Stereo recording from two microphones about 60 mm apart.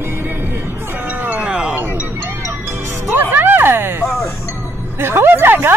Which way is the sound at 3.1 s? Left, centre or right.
Right.